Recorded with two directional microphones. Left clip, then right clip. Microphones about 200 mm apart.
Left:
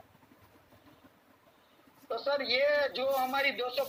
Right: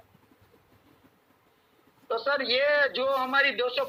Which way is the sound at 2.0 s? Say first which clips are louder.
Right 4 dB; 40° right (ahead or behind).